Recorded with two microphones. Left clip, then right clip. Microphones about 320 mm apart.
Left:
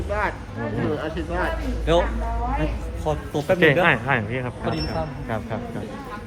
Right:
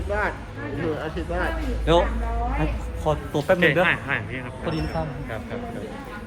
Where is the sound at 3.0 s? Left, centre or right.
Centre.